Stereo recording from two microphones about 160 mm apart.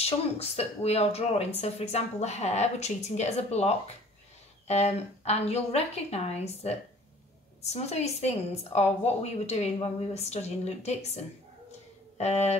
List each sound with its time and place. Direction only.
0.0 s a woman's voice: 40° left (ahead or behind)
12.2 s a woman's voice: 40° left (ahead or behind)